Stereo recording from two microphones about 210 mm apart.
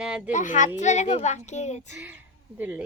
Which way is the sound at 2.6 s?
10° right (ahead or behind).